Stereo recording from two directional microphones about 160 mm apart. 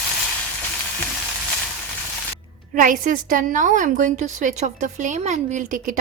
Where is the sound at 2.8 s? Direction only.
60° right (ahead or behind).